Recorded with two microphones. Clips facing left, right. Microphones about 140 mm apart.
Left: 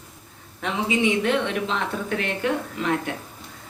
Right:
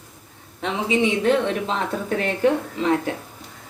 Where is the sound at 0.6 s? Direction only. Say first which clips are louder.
Right 2 dB; 30° right (ahead or behind).